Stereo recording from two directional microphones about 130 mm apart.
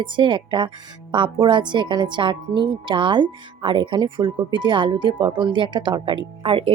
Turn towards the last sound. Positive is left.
turn(degrees=-45)  # may be behind; listen again after turning